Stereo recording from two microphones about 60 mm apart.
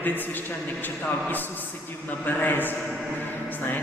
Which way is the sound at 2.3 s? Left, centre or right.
Left.